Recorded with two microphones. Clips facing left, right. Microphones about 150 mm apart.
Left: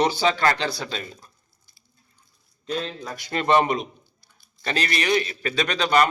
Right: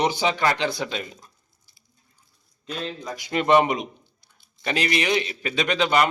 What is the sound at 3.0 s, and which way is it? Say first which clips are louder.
A man's voice: right 2 dB; 15° right (ahead or behind).